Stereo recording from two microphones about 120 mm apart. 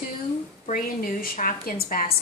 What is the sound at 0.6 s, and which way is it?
Speech, 90° left.